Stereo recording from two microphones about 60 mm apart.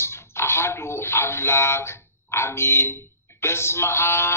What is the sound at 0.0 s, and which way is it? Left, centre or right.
A man's voice, left.